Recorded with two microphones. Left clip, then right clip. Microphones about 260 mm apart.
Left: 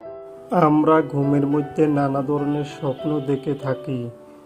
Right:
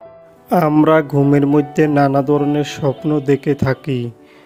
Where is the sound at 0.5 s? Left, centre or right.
Right.